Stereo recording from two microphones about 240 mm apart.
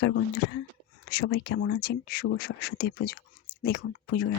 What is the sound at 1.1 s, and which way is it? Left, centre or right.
Speech, left.